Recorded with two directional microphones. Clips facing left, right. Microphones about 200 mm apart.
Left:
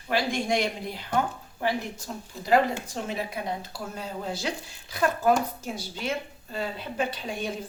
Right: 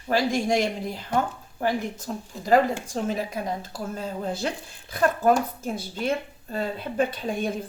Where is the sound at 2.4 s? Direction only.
45° right (ahead or behind).